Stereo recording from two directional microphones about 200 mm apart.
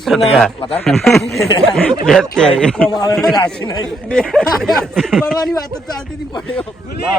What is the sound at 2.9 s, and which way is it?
Speech, 20° left (ahead or behind).